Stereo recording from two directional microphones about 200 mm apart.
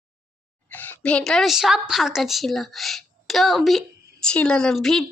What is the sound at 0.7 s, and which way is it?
A woman's voice, 5° left (ahead or behind).